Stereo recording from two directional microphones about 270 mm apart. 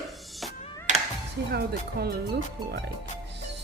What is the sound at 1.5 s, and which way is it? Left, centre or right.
Speech, right.